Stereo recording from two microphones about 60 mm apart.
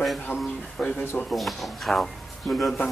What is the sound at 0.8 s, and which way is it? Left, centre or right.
Speech, centre.